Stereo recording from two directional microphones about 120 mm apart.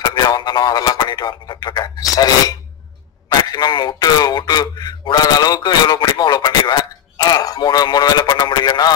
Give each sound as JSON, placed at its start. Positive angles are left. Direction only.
{"t": 0.0, "sound": "speech", "side_deg": 35}